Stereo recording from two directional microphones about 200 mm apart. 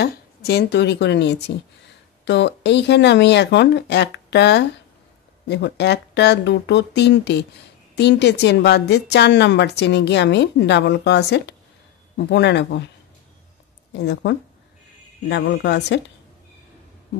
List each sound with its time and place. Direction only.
0.0 s a woman's voice: 55° left (ahead or behind)
13.9 s a woman's voice: 60° left (ahead or behind)